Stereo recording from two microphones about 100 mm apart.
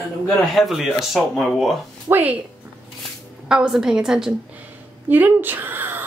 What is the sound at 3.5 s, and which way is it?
Speech, 5° right (ahead or behind).